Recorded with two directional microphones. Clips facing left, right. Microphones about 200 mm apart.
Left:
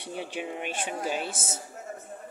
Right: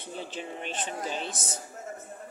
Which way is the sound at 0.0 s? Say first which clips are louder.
Left 3 dB; 15° left (ahead or behind).